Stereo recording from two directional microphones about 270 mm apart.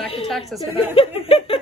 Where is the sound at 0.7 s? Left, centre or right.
Left.